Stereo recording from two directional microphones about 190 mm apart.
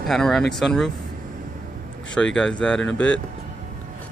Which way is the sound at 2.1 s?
5° left (ahead or behind).